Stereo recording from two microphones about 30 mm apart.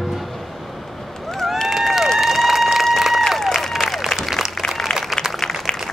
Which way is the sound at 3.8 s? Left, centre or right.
Centre.